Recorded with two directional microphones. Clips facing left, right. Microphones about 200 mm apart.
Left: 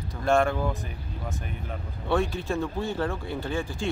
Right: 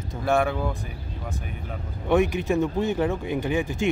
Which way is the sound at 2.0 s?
20° right (ahead or behind).